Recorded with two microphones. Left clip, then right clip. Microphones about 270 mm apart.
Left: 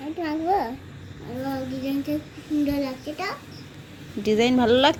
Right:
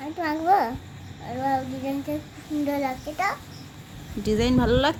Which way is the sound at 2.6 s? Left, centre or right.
Centre.